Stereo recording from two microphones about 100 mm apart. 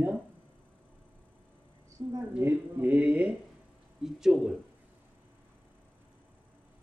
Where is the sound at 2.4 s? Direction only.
20° right (ahead or behind).